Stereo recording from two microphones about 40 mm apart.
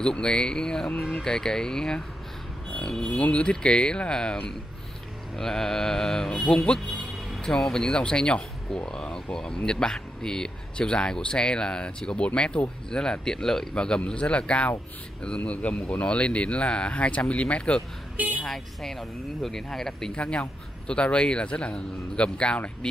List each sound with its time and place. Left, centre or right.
0.0 s speech: left
3.2 s speech: left; by 4.4 s centre
5.4 s speech: centre
7.0 s a sound: centre
7.6 s speech: centre
7.9 s speech: left
18.1 s a woman's voice: right
18.4 s speech: centre
20.2 s speech: left